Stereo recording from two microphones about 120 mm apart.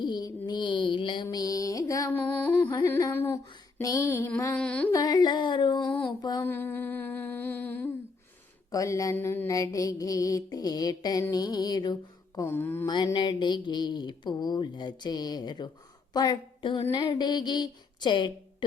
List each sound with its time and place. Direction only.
0.0 s a sound: 35° left (ahead or behind)
2.0 s music: 15° left (ahead or behind)
2.8 s mantra: 20° left (ahead or behind)
4.6 s music: 10° left (ahead or behind)
4.9 s speech: 35° left (ahead or behind)
6.4 s humming: 15° left (ahead or behind)
8.7 s mantra: 25° left (ahead or behind)
12.5 s mantra: 15° left (ahead or behind)
13.1 s a woman's voice: 40° left (ahead or behind)